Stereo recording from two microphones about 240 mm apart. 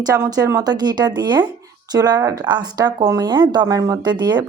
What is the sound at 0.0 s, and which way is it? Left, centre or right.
Speech, centre.